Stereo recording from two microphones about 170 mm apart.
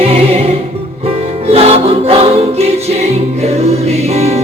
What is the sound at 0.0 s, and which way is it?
Music, 35° right (ahead or behind).